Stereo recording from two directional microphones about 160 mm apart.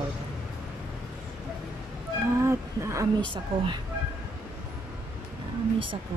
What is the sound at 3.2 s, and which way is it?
Speech, 30° right (ahead or behind).